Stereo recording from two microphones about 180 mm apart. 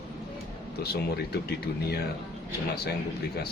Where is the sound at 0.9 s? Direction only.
60° left (ahead or behind).